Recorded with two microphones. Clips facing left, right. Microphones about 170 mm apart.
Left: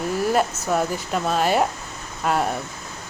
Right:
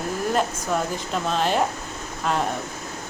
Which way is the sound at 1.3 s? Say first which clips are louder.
Left 2 dB; 10° left (ahead or behind).